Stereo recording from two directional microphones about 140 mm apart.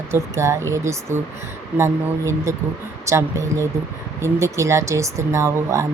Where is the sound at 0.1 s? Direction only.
20° right (ahead or behind).